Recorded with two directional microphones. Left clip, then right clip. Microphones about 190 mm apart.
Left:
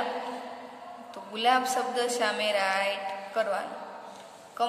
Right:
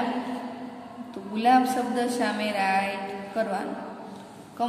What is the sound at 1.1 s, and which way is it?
A woman's voice, 20° left (ahead or behind).